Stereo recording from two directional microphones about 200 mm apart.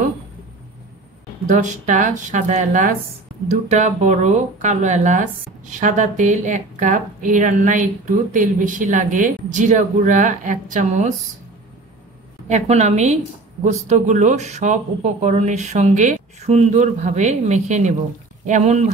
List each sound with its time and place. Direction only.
1.5 s speech: 40° right (ahead or behind)
12.4 s speech: 35° right (ahead or behind)